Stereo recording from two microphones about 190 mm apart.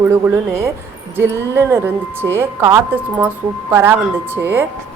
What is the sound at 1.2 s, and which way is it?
A woman's voice, 15° right (ahead or behind).